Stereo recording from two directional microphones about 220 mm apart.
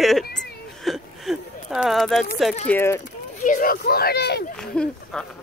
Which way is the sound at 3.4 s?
35° left (ahead or behind).